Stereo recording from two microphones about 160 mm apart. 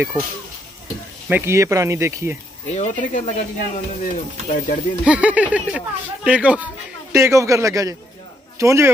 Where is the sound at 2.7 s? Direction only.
50° left (ahead or behind).